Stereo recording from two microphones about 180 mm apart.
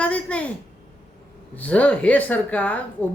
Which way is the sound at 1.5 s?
5° left (ahead or behind).